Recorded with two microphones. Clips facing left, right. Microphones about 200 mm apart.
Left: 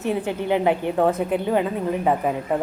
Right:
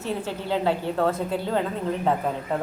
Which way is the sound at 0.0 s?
15° left (ahead or behind).